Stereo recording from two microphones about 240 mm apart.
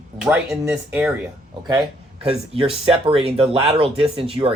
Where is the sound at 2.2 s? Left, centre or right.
Right.